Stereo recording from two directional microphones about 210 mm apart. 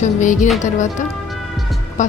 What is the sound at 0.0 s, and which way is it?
A woman's voice, 35° left (ahead or behind).